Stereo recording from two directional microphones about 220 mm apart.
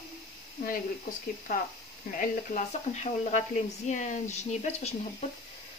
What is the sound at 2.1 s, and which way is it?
Speech, 35° left (ahead or behind).